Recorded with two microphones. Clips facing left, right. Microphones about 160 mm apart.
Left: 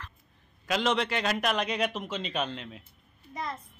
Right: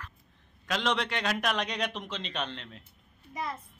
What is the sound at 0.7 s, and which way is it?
A man's voice, 5° left (ahead or behind).